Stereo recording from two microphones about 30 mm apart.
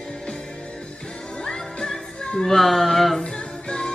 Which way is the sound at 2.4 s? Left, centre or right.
Centre.